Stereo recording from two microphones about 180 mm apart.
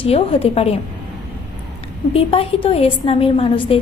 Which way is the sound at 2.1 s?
30° left (ahead or behind).